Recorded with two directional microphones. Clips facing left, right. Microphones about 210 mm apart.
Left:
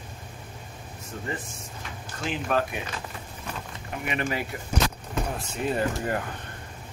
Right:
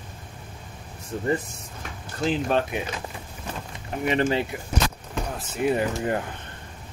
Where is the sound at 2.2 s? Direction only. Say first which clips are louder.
Right 4 dB; 25° right (ahead or behind).